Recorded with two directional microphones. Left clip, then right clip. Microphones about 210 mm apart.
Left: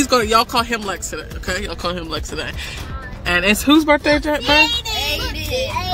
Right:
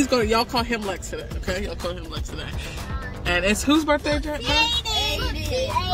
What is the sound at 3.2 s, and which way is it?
Speech, 15° left (ahead or behind).